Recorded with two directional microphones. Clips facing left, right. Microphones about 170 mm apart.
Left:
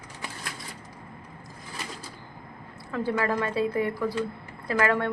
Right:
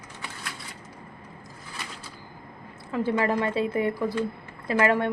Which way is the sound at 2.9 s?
20° right (ahead or behind).